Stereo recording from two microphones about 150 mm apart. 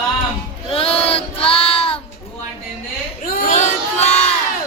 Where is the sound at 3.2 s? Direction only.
60° left (ahead or behind).